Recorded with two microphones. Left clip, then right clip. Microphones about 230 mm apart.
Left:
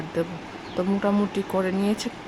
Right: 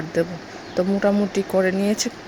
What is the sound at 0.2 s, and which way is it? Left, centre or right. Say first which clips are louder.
Speech: right 5 dB; centre.